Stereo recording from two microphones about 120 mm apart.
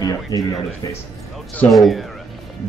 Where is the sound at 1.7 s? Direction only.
Centre (ahead or behind).